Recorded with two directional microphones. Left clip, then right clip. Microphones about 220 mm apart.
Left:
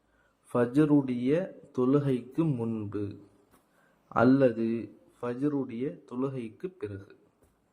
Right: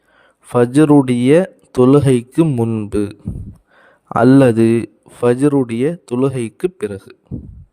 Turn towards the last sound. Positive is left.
turn(degrees=-50)  # may be behind; listen again after turning